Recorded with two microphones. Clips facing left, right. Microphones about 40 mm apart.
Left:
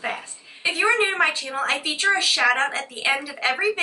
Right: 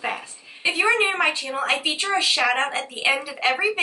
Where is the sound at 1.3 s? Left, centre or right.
Centre.